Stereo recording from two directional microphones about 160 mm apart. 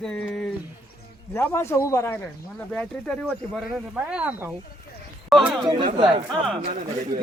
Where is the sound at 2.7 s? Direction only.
5° left (ahead or behind).